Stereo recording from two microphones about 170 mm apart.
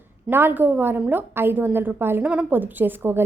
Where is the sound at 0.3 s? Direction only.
10° right (ahead or behind).